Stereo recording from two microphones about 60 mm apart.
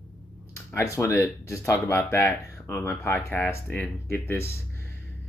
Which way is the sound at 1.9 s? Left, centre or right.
Left.